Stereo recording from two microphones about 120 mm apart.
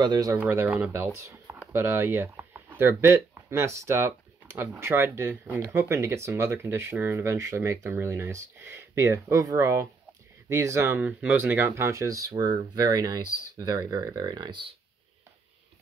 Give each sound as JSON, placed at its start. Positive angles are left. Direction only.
{"t": 0.0, "sound": "speech", "side_deg": -30}
{"t": 0.4, "sound": "speech", "side_deg": -20}